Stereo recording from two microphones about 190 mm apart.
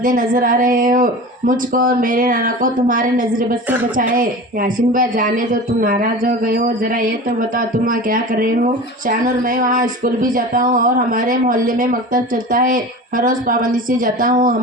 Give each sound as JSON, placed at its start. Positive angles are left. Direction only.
{"t": 0.0, "sound": "speech", "side_deg": -45}
{"t": 7.9, "sound": "speech", "side_deg": -45}